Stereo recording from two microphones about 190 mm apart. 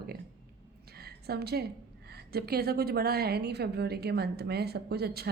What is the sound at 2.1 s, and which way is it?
A woman's voice, 55° right (ahead or behind).